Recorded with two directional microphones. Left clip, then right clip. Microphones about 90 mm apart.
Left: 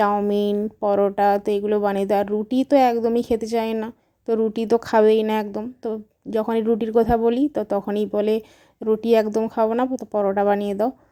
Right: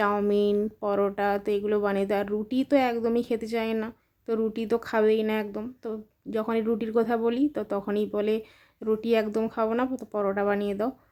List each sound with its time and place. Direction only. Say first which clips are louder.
0.3 s a woman's voice: left 2 dB; 45° left (ahead or behind)